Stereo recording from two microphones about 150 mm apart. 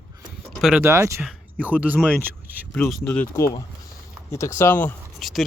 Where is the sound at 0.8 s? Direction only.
20° right (ahead or behind).